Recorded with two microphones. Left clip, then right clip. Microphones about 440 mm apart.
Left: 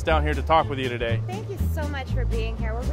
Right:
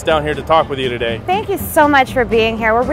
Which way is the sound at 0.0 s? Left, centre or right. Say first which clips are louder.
Right 8 dB; left.